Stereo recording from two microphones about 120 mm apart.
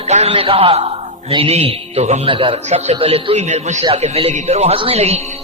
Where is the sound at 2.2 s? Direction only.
45° right (ahead or behind).